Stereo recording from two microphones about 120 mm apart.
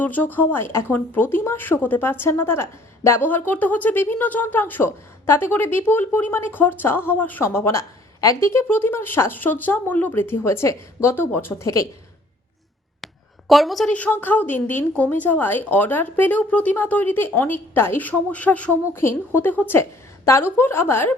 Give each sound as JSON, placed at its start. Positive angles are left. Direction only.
{"t": 0.0, "sound": "speech", "side_deg": 15}
{"t": 11.6, "sound": "speech", "side_deg": 25}
{"t": 13.5, "sound": "a woman's voice", "side_deg": 0}
{"t": 13.9, "sound": "speech", "side_deg": 15}